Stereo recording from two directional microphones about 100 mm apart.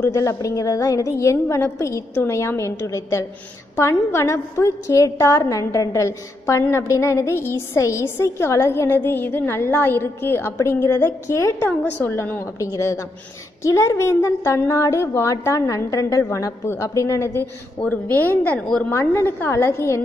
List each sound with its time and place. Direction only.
0.0 s a woman's voice: 30° left (ahead or behind)
18.6 s a woman's voice: 5° left (ahead or behind)
18.9 s a woman's voice: 25° left (ahead or behind)